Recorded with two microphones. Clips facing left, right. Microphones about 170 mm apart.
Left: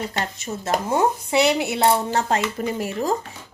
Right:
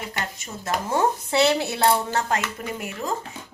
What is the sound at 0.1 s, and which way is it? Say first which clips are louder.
A woman's voice: left 5 dB; 25° left (ahead or behind).